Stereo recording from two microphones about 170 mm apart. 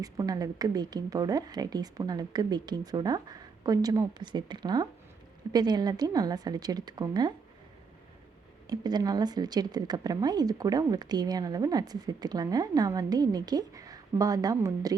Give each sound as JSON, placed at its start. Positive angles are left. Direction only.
{"t": 0.0, "sound": "speech", "side_deg": -20}
{"t": 8.6, "sound": "speech", "side_deg": -25}